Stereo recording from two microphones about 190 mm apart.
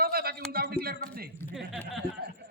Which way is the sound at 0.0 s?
55° right (ahead or behind).